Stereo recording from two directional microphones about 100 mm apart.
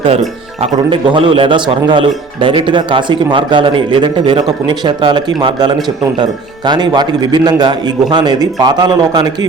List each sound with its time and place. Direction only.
0.9 s a man's voice: 55° right (ahead or behind)